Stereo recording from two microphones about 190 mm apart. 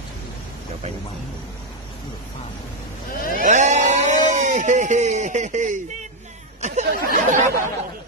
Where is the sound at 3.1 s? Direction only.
45° left (ahead or behind).